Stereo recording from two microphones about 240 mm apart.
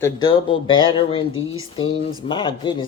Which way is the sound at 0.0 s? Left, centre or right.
Centre.